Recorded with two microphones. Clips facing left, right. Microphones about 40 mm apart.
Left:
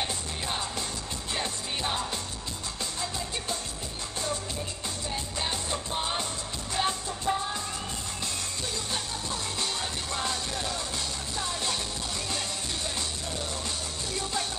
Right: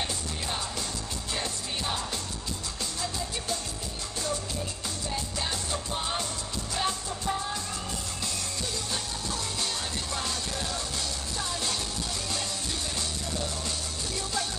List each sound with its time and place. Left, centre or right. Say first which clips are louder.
1.3 s music: left 1 dB; left
5.4 s music: left 2 dB; left
5.9 s music: left 2 dB; centre